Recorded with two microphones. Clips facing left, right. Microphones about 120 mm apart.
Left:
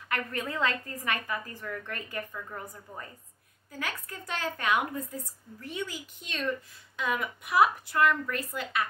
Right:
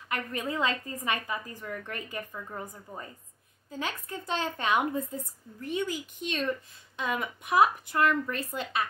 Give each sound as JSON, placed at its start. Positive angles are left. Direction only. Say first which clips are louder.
{"t": 0.1, "sound": "a woman's voice", "louder": "right 1 dB", "side_deg": -20}